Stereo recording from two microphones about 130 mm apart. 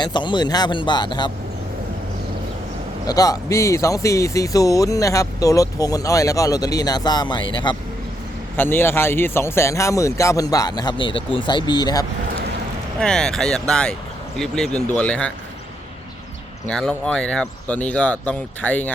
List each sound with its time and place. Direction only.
0.0 s speech: 35° left (ahead or behind)
3.1 s speech: 30° left (ahead or behind)
8.5 s speech: 15° left (ahead or behind); by 12.0 s 30° left (ahead or behind)
13.0 s speech: 5° left (ahead or behind)
16.6 s speech: 5° left (ahead or behind)